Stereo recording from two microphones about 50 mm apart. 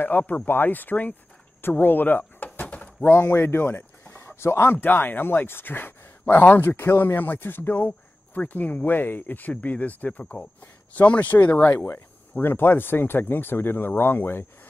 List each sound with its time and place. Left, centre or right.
0.1 s speech: left
1.6 s a sound: left
3.0 s speech: left
4.4 s speech: left
11.9 s speech: left